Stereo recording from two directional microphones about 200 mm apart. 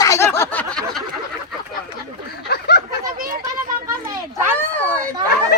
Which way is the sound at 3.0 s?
45° right (ahead or behind).